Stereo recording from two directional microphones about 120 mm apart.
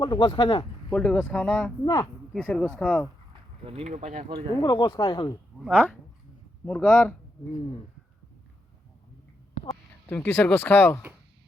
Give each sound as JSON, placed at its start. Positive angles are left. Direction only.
{"t": 0.0, "sound": "speech", "side_deg": 40}
{"t": 0.9, "sound": "speech", "side_deg": 10}
{"t": 1.8, "sound": "speech", "side_deg": 35}
{"t": 2.4, "sound": "speech", "side_deg": 10}
{"t": 3.6, "sound": "speech", "side_deg": -55}
{"t": 3.8, "sound": "speech", "side_deg": -90}
{"t": 4.6, "sound": "speech", "side_deg": 35}
{"t": 5.6, "sound": "speech", "side_deg": -10}
{"t": 6.7, "sound": "speech", "side_deg": 10}
{"t": 10.1, "sound": "speech", "side_deg": 15}